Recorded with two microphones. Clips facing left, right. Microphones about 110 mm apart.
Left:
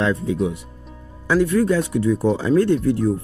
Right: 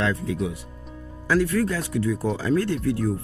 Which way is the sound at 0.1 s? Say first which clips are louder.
Left 5 dB; 25° left (ahead or behind).